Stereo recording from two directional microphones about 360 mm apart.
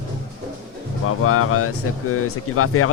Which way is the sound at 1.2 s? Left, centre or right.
Left.